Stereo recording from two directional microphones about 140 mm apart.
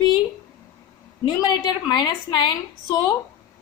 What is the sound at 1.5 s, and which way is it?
Speech, 30° left (ahead or behind).